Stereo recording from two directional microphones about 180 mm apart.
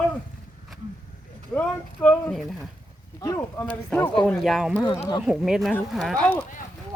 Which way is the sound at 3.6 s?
10° left (ahead or behind).